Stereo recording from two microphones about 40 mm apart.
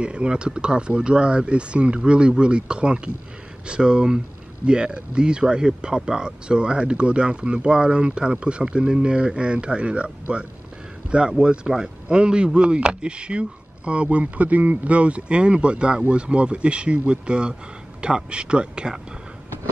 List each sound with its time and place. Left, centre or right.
0.0 s speech: right